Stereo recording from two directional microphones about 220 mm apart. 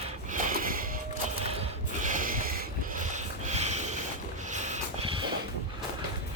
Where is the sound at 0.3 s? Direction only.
40° right (ahead or behind).